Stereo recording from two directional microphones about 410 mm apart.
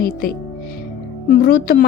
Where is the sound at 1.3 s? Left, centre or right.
Left.